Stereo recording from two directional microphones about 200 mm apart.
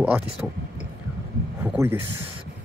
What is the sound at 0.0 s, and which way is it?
Speech, 5° right (ahead or behind).